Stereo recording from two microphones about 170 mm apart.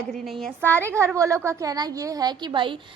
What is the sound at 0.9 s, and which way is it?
A woman's voice, 15° right (ahead or behind).